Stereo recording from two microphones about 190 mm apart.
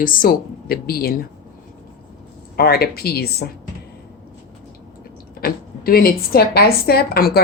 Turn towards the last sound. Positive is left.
turn(degrees=55)  # may be behind; listen again after turning